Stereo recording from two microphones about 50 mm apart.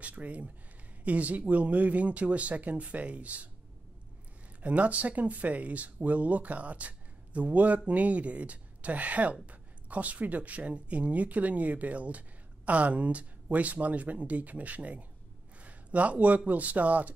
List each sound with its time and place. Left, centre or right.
0.0 s speech: right
4.6 s speech: right